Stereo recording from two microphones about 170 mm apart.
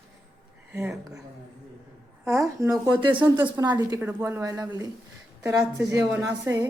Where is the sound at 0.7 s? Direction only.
15° right (ahead or behind).